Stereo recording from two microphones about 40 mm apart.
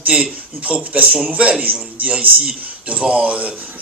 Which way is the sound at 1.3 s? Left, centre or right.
Right.